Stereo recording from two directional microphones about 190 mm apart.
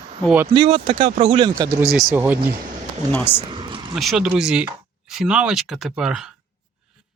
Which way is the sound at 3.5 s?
25° right (ahead or behind).